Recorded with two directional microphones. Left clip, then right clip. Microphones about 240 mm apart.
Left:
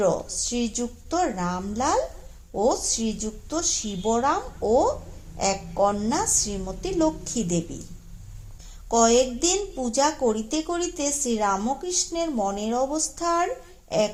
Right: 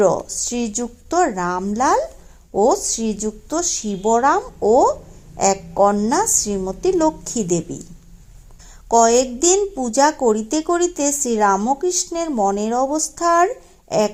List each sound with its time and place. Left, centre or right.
0.0 s speech: right
8.9 s speech: right